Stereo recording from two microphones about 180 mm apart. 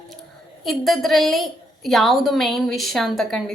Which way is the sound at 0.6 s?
Centre (ahead or behind).